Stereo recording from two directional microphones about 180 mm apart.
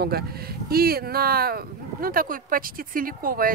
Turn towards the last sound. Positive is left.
turn(degrees=-55)  # may be behind; listen again after turning